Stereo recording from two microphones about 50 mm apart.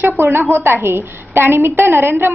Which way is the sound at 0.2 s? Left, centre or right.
Right.